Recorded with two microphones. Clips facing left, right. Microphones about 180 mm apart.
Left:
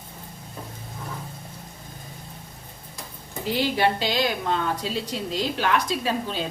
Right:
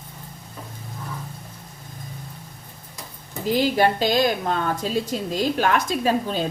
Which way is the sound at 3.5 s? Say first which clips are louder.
Right 3 dB; 45° right (ahead or behind).